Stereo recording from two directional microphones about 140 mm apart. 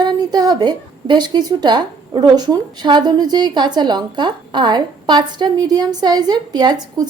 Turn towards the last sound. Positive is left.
turn(degrees=-30)  # may be behind; listen again after turning